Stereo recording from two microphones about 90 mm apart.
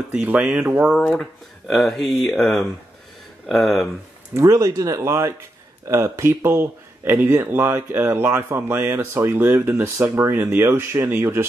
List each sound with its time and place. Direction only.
0.1 s speech: 15° right (ahead or behind)
0.9 s speech: 5° left (ahead or behind)
4.3 s speech: 35° right (ahead or behind)